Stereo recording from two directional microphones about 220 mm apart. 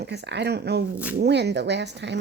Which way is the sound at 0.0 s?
50° right (ahead or behind).